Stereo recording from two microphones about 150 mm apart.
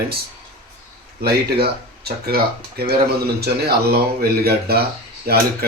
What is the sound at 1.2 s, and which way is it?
A man's voice, 90° right.